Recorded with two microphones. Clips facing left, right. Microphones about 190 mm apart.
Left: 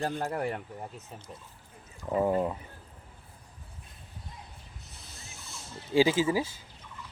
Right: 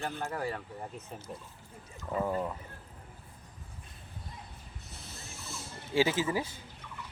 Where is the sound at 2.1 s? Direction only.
25° left (ahead or behind).